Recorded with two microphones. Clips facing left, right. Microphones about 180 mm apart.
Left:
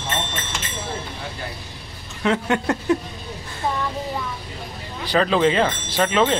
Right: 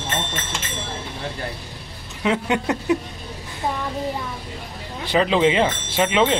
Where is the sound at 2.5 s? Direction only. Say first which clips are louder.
Left 1 dB; centre (ahead or behind).